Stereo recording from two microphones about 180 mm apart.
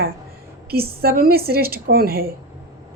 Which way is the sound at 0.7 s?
60° right (ahead or behind).